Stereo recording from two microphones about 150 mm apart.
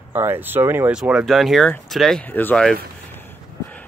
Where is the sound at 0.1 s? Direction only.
15° right (ahead or behind).